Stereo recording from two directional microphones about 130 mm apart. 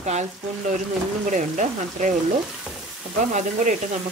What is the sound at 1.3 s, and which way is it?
Speech, 70° right (ahead or behind).